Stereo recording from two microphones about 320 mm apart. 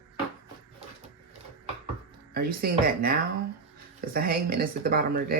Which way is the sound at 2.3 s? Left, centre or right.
Right.